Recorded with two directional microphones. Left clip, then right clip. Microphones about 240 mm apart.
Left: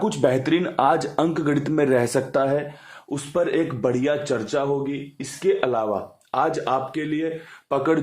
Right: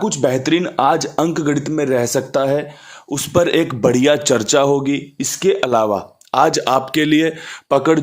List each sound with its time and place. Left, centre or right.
0.0 s speech: centre
3.3 s a man's voice: right
7.7 s speech: right